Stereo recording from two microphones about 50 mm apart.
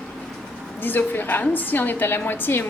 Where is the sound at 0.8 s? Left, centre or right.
Left.